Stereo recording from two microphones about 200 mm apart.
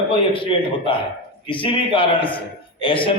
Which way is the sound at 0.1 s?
25° left (ahead or behind).